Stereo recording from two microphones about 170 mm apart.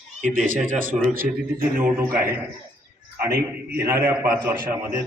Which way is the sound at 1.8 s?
10° right (ahead or behind).